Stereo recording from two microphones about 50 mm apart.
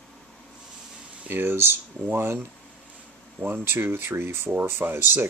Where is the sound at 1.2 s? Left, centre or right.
Right.